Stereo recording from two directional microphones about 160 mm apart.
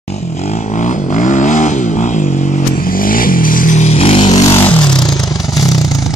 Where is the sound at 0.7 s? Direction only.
50° left (ahead or behind).